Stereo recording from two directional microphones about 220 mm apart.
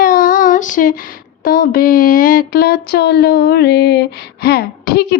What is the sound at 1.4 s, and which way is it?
A woman's voice, 40° left (ahead or behind).